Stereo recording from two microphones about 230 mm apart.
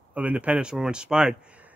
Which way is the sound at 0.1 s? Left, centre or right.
Centre.